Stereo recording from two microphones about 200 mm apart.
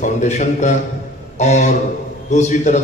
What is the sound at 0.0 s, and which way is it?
A man's voice, 35° left (ahead or behind).